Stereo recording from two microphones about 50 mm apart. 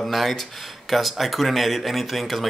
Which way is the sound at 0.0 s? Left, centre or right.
Centre.